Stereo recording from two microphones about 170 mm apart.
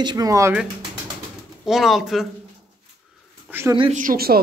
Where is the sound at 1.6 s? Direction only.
Centre (ahead or behind).